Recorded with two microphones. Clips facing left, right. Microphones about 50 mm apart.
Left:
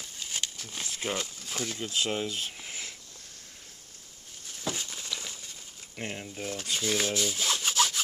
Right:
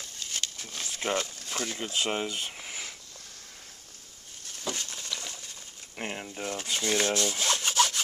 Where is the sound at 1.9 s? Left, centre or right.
Right.